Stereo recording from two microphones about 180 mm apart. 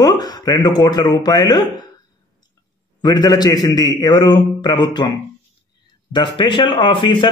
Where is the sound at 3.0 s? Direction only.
20° left (ahead or behind).